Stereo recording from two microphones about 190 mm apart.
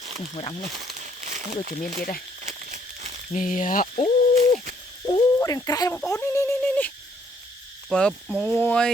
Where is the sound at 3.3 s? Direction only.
40° left (ahead or behind).